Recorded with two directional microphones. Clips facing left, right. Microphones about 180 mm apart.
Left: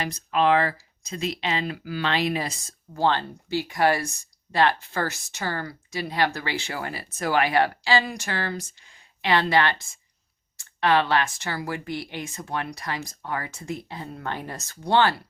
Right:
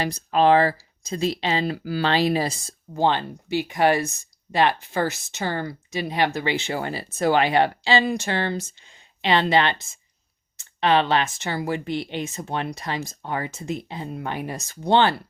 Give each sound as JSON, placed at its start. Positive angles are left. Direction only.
{"t": 0.0, "sound": "speech", "side_deg": -35}
{"t": 2.9, "sound": "speech", "side_deg": -20}